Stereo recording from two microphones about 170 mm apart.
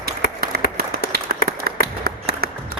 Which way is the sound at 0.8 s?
65° right (ahead or behind).